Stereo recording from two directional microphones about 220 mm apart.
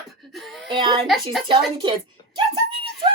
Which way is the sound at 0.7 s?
20° right (ahead or behind).